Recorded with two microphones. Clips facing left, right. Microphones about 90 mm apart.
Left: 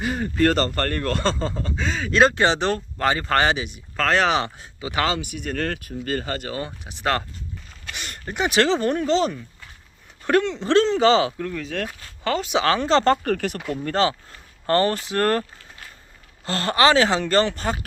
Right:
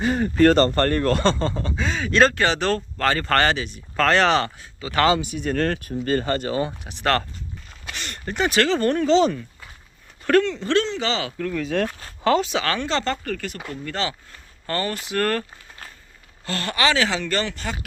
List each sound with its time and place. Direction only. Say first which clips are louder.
0.0 s speech: right 4 dB; 40° right (ahead or behind)
1.2 s speech: right 3 dB; 5° left (ahead or behind)
2.3 s speech: left 1 dB; 25° left (ahead or behind)
5.7 s speech: right 4 dB; 30° right (ahead or behind)
6.8 s speech: right 2 dB; 5° left (ahead or behind)
10.2 s speech: right 1 dB; 20° left (ahead or behind); by 11.3 s 40° left (ahead or behind)
11.3 s speech: right 3 dB; 20° left (ahead or behind); by 13.1 s 35° left (ahead or behind)
13.2 s speech: left 6 dB; 60° left (ahead or behind)
13.8 s speech: left 6 dB; 40° left (ahead or behind)
16.5 s speech: left 4 dB; 30° left (ahead or behind)